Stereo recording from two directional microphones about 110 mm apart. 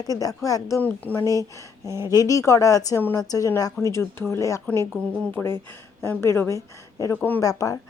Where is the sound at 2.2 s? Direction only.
30° left (ahead or behind).